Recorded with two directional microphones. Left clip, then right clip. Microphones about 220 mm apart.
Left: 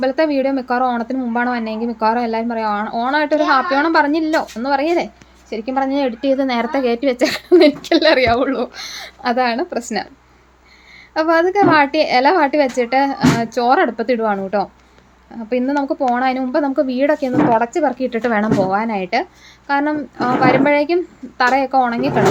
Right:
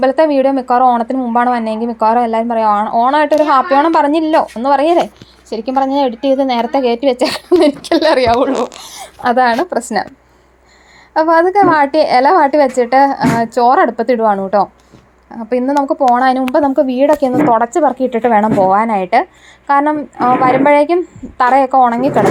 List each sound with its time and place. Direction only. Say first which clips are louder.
0.0 s a woman's voice: right 6 dB; 10° right (ahead or behind)
9.0 s a woman's voice: right 6 dB; 15° right (ahead or behind)
11.1 s a woman's voice: right 5 dB; 10° right (ahead or behind)